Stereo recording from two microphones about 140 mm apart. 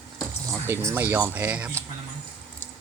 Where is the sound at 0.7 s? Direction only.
15° right (ahead or behind).